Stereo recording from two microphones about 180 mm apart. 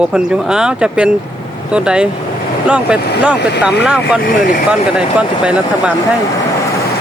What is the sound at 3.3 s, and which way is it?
Speech, 70° left (ahead or behind).